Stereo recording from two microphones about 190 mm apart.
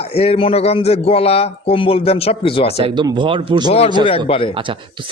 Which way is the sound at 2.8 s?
25° right (ahead or behind).